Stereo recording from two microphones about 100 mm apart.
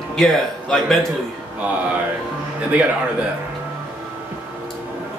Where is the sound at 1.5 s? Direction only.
15° right (ahead or behind).